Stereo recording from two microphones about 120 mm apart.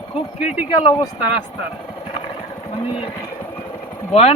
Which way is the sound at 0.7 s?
40° left (ahead or behind).